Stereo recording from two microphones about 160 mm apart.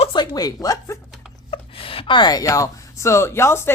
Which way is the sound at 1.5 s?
35° left (ahead or behind).